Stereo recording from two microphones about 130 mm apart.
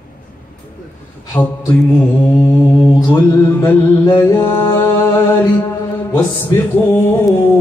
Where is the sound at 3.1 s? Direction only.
15° left (ahead or behind).